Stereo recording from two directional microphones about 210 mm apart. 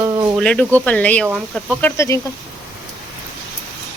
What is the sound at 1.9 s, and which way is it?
Speech, 15° left (ahead or behind).